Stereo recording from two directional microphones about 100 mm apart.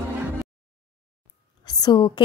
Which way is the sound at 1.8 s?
50° left (ahead or behind).